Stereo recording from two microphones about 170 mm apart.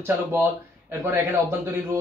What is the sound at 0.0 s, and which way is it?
A man's voice, 15° right (ahead or behind).